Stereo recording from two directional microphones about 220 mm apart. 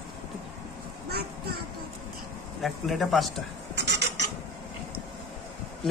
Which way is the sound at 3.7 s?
50° right (ahead or behind).